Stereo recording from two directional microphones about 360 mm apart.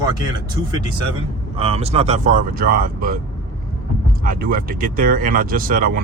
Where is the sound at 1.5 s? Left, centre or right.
Centre.